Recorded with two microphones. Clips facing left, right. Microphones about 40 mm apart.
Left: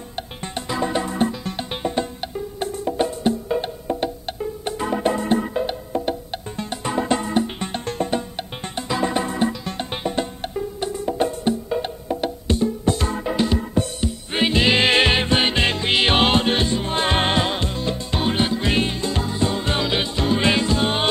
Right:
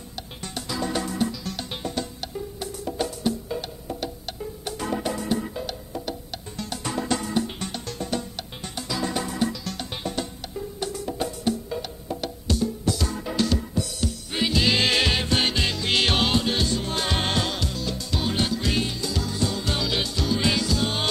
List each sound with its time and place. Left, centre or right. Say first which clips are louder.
0.1 s music: left 5 dB; left
5.0 s music: left 7 dB; left
13.3 s music: left 3 dB; left
14.3 s music: left 5 dB; left